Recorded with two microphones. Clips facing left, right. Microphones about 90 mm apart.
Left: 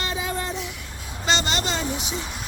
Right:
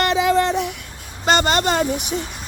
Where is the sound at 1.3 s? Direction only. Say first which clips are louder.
Right 7 dB; 50° right (ahead or behind).